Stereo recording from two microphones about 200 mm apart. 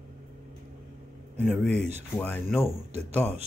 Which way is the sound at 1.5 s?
5° left (ahead or behind).